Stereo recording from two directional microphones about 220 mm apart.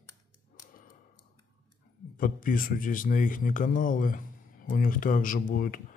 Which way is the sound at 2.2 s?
40° left (ahead or behind).